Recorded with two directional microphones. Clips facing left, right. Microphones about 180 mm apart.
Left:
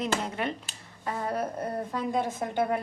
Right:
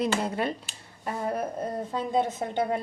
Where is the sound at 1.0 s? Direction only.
20° right (ahead or behind).